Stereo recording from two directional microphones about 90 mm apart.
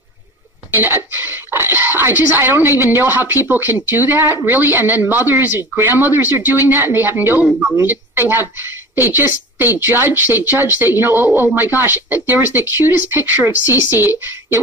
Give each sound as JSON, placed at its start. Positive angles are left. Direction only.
{"t": 0.7, "sound": "a woman's voice", "side_deg": -25}